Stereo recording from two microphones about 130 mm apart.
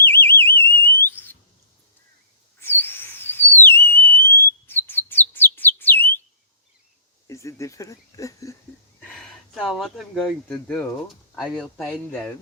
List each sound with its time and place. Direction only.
0.0 s alarm: 15° left (ahead or behind)
2.6 s whistle: 15° left (ahead or behind)
7.3 s speech: 25° left (ahead or behind)
9.1 s a sound: 5° left (ahead or behind)
10.5 s speech: 5° left (ahead or behind)